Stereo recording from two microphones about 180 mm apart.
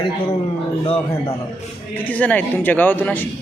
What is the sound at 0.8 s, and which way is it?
Speech, 30° left (ahead or behind).